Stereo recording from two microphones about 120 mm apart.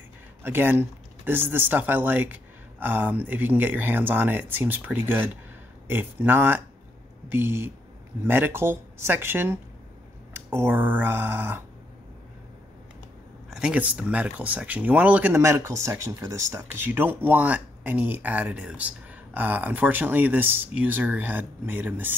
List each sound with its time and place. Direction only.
0.4 s speech: 20° right (ahead or behind)
13.5 s speech: 5° right (ahead or behind)
15.3 s speech: 20° right (ahead or behind)